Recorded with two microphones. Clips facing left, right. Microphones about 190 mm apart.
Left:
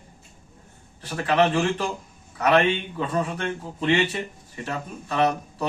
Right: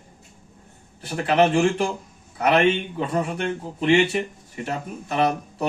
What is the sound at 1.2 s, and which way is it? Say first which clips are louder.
Speech: right 3 dB; 25° right (ahead or behind).